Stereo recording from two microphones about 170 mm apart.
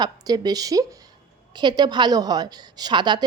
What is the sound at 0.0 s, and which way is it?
A woman's voice, 25° right (ahead or behind).